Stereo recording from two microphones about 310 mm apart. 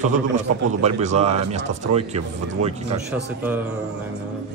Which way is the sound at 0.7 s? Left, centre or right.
Right.